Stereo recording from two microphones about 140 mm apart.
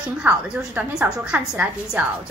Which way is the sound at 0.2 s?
10° right (ahead or behind).